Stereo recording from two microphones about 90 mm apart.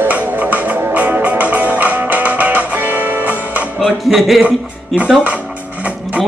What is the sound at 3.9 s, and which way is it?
Music, centre (ahead or behind).